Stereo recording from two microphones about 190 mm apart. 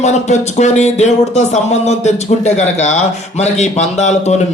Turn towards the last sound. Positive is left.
turn(degrees=40)  # may be behind; listen again after turning